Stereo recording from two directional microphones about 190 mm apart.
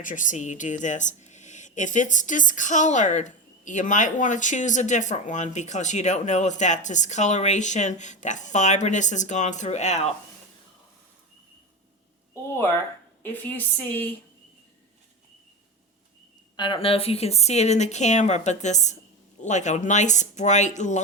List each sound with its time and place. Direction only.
0.0 s speech: 45° left (ahead or behind)
12.3 s a sound: 10° left (ahead or behind)
13.2 s speech: 10° left (ahead or behind)
16.6 s speech: 25° left (ahead or behind)